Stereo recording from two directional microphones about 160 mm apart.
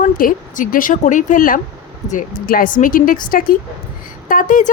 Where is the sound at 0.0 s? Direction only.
55° left (ahead or behind).